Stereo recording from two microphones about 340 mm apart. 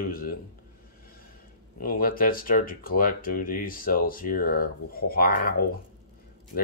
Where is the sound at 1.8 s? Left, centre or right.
Left.